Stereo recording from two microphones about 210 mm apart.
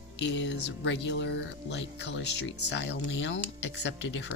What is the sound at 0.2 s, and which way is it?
Speech, 55° left (ahead or behind).